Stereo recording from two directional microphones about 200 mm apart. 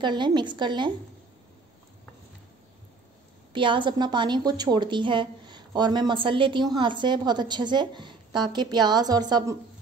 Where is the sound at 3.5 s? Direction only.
25° right (ahead or behind).